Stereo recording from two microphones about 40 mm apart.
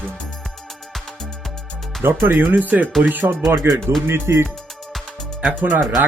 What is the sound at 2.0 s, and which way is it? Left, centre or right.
Speech, right.